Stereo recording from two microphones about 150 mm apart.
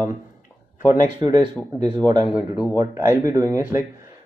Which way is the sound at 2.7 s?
15° right (ahead or behind).